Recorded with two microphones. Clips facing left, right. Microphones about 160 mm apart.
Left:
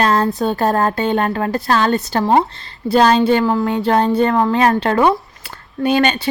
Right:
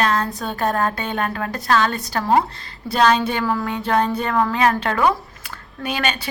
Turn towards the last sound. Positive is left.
turn(degrees=30)  # may be behind; listen again after turning